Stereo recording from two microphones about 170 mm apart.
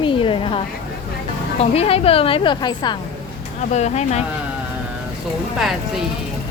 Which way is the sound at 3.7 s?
40° left (ahead or behind).